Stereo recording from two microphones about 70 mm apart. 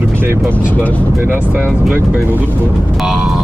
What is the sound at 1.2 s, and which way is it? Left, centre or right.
Speech, right.